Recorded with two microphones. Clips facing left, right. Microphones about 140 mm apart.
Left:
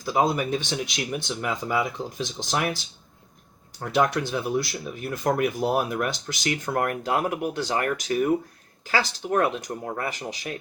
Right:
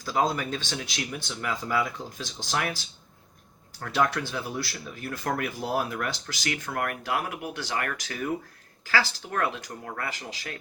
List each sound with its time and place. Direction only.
0.0 s speech: 15° left (ahead or behind)
3.8 s speech: 20° left (ahead or behind)